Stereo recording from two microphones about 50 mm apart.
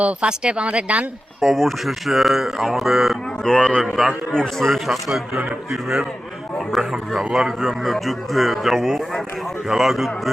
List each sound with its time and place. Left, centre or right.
0.0 s speech: right
1.4 s speech: centre
3.4 s a man's voice: centre
5.0 s speech: centre